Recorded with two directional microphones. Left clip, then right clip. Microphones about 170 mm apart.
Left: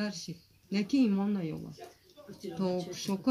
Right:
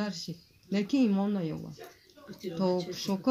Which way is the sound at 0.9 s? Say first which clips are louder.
Right 1 dB; 40° right (ahead or behind).